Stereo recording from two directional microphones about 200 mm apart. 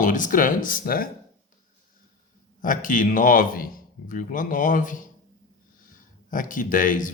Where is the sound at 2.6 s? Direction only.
40° left (ahead or behind).